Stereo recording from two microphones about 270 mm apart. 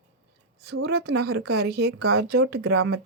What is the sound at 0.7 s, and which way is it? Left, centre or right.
Speech, right.